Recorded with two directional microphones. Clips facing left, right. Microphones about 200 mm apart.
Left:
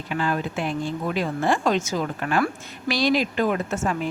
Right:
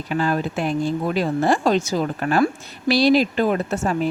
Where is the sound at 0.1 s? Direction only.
40° right (ahead or behind).